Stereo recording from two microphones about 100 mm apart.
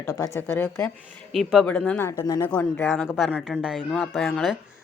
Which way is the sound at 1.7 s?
15° left (ahead or behind).